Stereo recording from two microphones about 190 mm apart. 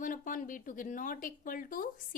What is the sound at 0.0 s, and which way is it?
A woman's voice, 45° left (ahead or behind).